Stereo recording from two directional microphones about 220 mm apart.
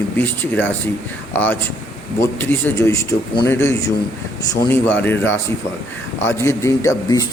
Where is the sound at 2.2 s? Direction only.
10° left (ahead or behind).